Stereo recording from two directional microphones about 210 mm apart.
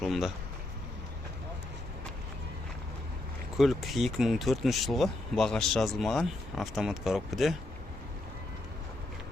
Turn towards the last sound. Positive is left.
turn(degrees=0)  # may be behind; listen again after turning